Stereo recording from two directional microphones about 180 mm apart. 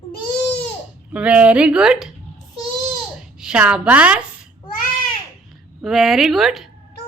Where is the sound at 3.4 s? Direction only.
5° right (ahead or behind).